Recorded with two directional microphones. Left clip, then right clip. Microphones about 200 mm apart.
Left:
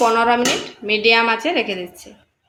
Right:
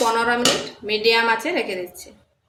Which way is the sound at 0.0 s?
30° left (ahead or behind).